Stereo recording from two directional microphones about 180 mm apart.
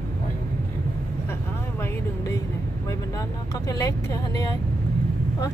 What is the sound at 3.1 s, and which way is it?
Vehicle, 20° left (ahead or behind).